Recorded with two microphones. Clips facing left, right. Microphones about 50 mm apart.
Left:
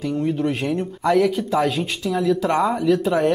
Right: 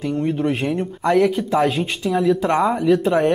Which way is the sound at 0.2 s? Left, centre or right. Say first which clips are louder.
Right 2 dB; centre.